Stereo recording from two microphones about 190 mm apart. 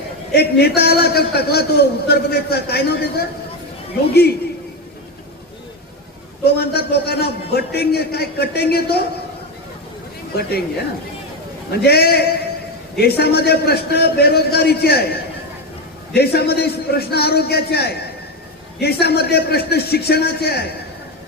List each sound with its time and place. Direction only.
0.3 s a man's voice: 55° left (ahead or behind)
6.4 s a man's voice: 55° left (ahead or behind)
11.7 s a man's voice: 55° left (ahead or behind)